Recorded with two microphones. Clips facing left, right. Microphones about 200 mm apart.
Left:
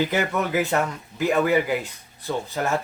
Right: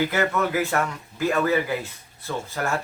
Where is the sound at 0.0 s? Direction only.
15° left (ahead or behind).